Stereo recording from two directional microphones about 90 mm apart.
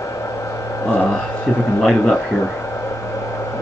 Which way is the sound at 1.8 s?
5° left (ahead or behind).